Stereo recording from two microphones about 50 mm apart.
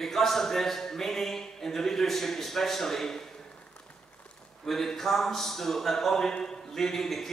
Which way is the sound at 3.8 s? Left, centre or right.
Left.